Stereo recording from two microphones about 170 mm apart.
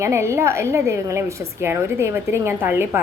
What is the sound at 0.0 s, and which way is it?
A woman's voice, 15° right (ahead or behind).